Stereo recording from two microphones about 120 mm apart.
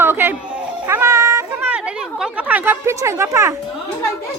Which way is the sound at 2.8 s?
25° right (ahead or behind).